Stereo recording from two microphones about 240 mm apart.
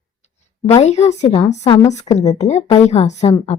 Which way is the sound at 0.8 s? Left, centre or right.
Left.